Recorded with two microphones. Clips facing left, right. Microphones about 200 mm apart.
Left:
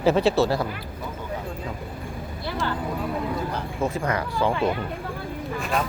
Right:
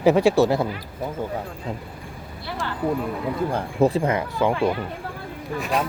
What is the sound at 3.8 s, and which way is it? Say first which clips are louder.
Speech: right 6 dB; 30° right (ahead or behind).